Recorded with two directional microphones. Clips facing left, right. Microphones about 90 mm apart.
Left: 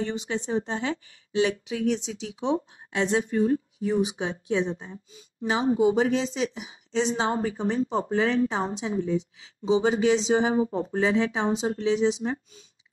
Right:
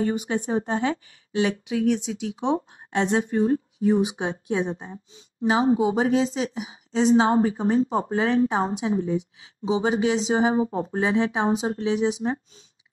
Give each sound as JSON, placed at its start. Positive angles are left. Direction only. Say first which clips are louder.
{"t": 0.0, "sound": "a woman's voice", "louder": "right 4 dB", "side_deg": -40}
{"t": 5.4, "sound": "a woman's voice", "louder": "right 2 dB", "side_deg": -35}